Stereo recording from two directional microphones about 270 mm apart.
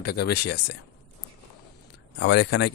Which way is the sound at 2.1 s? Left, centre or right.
Left.